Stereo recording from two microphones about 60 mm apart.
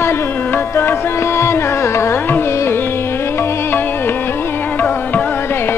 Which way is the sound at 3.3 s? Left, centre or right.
Left.